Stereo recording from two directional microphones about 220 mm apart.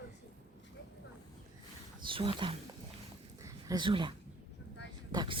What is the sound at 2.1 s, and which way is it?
Speech, 25° right (ahead or behind).